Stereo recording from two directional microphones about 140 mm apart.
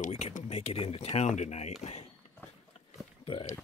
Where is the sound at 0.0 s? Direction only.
55° left (ahead or behind).